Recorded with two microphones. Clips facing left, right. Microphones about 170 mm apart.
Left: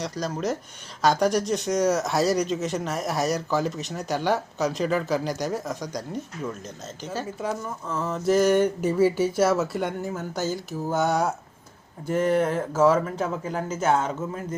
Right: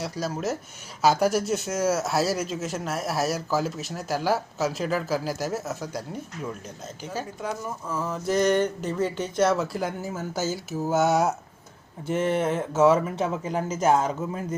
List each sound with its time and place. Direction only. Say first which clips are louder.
0.0 s speech: left 1 dB; 5° right (ahead or behind)
12.1 s a sound: left 2 dB; 20° right (ahead or behind)
13.2 s speech: right 1 dB; 10° right (ahead or behind)